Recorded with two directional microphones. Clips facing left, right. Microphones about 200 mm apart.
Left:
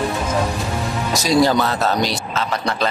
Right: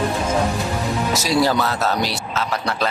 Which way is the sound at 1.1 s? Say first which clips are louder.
Left 4 dB; 5° right (ahead or behind).